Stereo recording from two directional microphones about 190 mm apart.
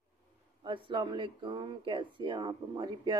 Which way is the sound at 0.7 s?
25° right (ahead or behind).